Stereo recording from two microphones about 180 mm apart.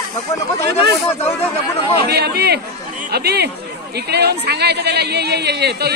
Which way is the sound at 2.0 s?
65° right (ahead or behind).